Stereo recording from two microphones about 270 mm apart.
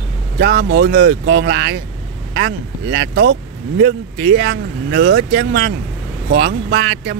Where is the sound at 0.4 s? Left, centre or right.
Right.